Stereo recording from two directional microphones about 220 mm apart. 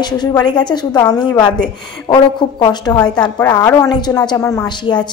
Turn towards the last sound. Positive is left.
turn(degrees=15)  # may be behind; listen again after turning